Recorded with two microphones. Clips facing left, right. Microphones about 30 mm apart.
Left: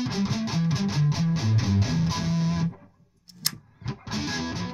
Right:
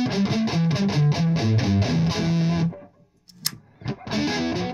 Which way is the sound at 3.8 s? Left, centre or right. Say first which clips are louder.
Right 6 dB; right.